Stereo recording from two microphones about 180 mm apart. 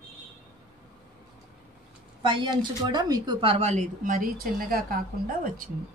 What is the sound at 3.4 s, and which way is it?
A woman's voice, 35° right (ahead or behind).